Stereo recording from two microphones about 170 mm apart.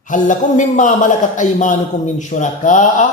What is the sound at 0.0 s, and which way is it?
A man's voice, 50° left (ahead or behind).